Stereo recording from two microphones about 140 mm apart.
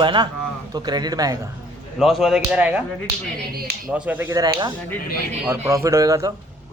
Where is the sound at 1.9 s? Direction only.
Centre (ahead or behind).